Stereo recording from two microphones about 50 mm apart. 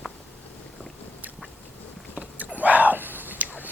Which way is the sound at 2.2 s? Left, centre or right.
Right.